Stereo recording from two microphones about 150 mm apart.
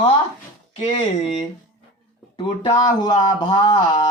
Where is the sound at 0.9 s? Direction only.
40° left (ahead or behind).